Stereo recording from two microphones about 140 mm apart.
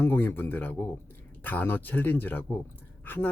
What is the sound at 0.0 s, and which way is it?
Speech, 15° left (ahead or behind).